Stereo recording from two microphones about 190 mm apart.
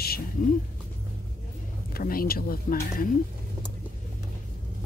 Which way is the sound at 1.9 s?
50° left (ahead or behind).